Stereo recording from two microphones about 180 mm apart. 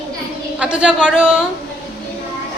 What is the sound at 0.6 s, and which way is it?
Speech, 5° right (ahead or behind).